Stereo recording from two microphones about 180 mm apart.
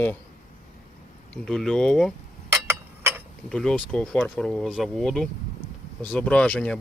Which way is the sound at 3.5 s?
5° left (ahead or behind).